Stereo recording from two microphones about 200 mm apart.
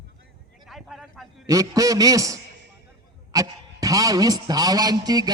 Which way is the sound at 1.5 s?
15° right (ahead or behind).